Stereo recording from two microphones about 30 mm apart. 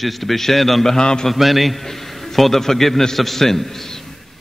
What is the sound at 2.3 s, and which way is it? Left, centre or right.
A man's voice, centre.